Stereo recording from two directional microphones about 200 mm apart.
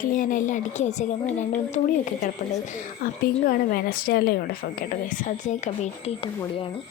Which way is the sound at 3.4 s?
45° left (ahead or behind).